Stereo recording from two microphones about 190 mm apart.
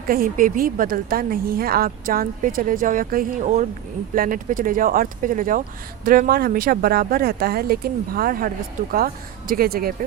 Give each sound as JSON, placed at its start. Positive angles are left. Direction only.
{"t": 0.1, "sound": "speech", "side_deg": -45}